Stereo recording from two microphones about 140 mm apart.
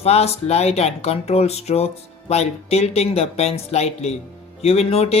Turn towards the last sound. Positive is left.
turn(degrees=45)  # may be behind; listen again after turning